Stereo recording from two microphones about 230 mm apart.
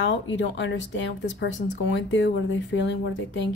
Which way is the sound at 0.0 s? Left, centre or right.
Left.